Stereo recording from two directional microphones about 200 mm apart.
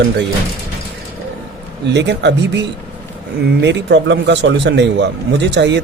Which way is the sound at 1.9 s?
60° right (ahead or behind).